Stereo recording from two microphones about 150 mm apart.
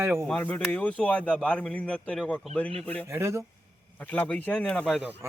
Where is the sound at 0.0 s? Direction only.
15° right (ahead or behind).